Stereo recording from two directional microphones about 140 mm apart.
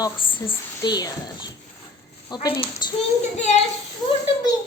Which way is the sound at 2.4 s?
35° left (ahead or behind).